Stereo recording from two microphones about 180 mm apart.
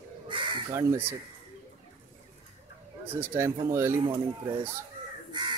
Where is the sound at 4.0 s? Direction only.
25° right (ahead or behind).